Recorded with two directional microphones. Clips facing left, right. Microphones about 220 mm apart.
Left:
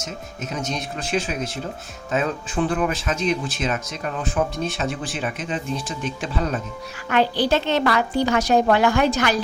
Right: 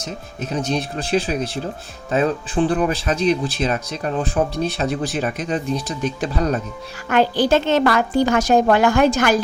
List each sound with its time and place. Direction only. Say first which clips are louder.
0.0 s a woman's voice: right 3 dB; 35° right (ahead or behind)